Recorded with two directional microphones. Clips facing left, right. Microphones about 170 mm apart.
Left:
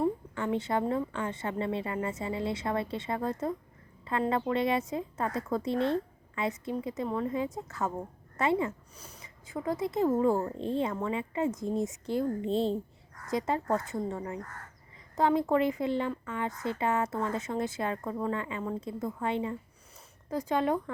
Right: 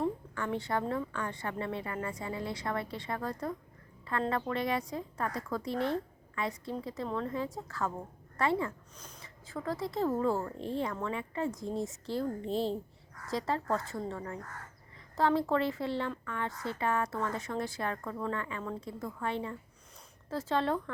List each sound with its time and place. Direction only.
0.0 s a woman's voice: 20° left (ahead or behind)
9.0 s a sound: 10° left (ahead or behind)
9.5 s a woman's voice: 20° left (ahead or behind)